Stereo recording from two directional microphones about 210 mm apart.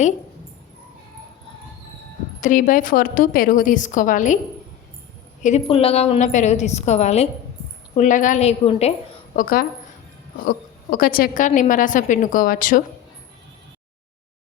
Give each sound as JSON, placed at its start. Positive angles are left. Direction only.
{"t": 2.4, "sound": "a woman's voice", "side_deg": 40}
{"t": 5.4, "sound": "a woman's voice", "side_deg": 30}
{"t": 9.3, "sound": "a woman's voice", "side_deg": 40}
{"t": 10.9, "sound": "a woman's voice", "side_deg": 45}